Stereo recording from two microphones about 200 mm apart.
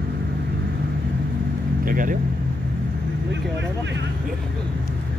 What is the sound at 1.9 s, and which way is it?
Speech, 45° right (ahead or behind).